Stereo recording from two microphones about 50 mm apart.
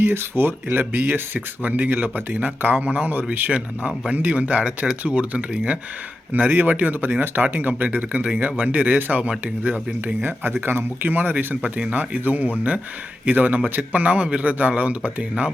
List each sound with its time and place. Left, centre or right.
0.1 s speech: right; by 5.8 s centre
6.3 s speech: right